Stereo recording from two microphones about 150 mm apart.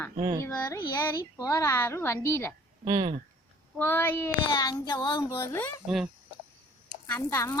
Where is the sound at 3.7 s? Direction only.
15° left (ahead or behind); by 5.4 s 30° left (ahead or behind).